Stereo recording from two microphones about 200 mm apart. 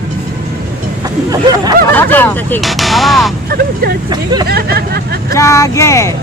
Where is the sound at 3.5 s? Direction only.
50° right (ahead or behind).